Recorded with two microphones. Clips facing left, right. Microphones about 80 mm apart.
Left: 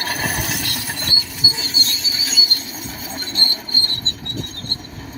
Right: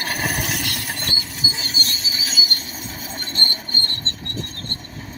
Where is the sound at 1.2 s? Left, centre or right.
Right.